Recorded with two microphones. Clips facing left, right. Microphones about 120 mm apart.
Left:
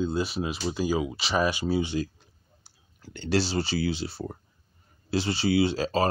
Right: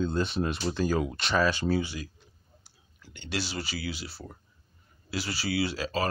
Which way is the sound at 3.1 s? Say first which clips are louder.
Left 8 dB; 35° left (ahead or behind).